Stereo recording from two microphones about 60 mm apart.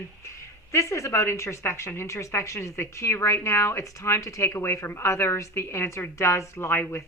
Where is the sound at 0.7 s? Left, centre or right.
Left.